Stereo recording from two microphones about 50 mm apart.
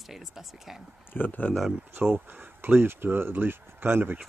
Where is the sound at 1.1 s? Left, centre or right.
Left.